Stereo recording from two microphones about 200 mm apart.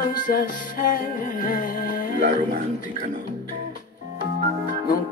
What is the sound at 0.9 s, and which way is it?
Music, 45° left (ahead or behind).